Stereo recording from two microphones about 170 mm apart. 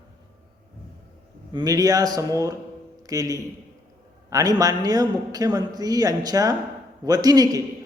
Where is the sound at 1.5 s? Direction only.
25° right (ahead or behind).